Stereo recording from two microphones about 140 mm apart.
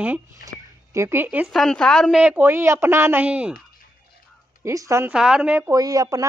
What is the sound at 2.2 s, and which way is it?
Speech, 15° right (ahead or behind).